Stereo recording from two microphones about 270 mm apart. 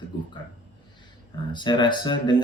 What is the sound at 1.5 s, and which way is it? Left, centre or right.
Speech, centre.